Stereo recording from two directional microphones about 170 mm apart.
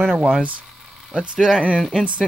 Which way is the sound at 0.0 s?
5° right (ahead or behind).